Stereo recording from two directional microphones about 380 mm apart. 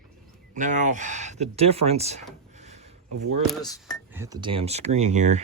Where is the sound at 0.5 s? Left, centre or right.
Centre.